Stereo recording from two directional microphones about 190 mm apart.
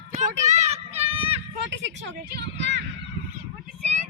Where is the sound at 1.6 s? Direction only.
65° right (ahead or behind).